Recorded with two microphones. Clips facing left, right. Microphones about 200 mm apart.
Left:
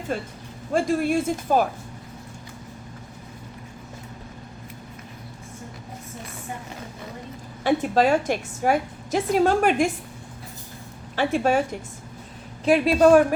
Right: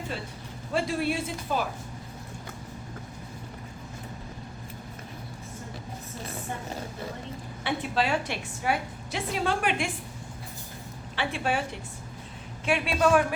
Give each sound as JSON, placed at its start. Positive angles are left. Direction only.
{"t": 0.1, "sound": "a woman's voice", "side_deg": 50}
{"t": 7.6, "sound": "a woman's voice", "side_deg": 45}
{"t": 11.2, "sound": "a woman's voice", "side_deg": 45}